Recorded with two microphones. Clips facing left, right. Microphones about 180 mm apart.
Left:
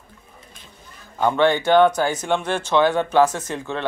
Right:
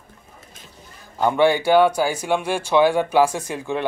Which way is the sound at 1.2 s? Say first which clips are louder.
Right 1 dB; 10° right (ahead or behind).